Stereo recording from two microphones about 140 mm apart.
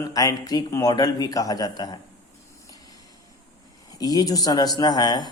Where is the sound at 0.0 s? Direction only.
25° left (ahead or behind).